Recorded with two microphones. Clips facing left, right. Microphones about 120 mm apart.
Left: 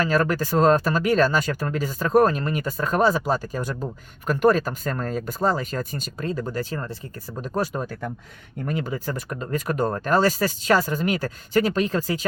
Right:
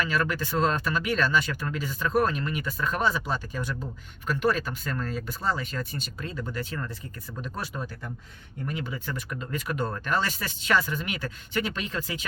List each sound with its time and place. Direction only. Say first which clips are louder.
0.0 s speech: left 6 dB; 40° left (ahead or behind)